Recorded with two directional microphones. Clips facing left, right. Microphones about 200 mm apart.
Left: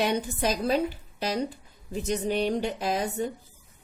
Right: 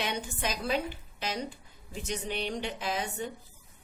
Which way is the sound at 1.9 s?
40° left (ahead or behind).